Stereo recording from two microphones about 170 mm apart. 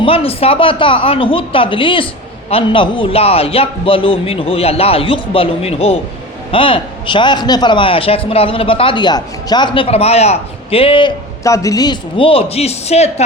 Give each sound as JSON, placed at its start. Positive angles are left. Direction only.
{"t": 0.0, "sound": "a man's voice", "side_deg": 35}
{"t": 11.4, "sound": "a man's voice", "side_deg": 20}